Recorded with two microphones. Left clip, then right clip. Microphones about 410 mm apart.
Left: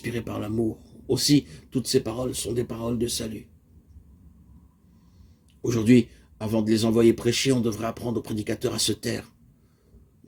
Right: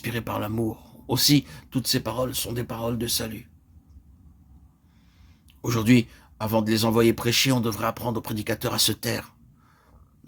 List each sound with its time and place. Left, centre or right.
0.0 s speech: right
5.6 s speech: right